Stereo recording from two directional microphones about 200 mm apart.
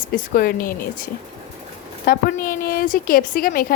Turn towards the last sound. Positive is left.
turn(degrees=45)  # may be behind; listen again after turning